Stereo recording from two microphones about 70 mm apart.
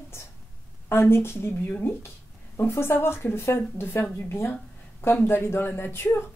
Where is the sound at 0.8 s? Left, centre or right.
Left.